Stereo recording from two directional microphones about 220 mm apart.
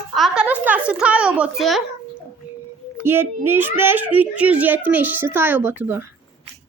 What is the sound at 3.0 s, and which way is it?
A child's voice, 10° right (ahead or behind).